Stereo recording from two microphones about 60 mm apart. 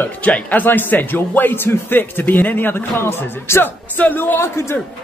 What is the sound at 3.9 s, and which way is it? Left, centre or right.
Speech, left.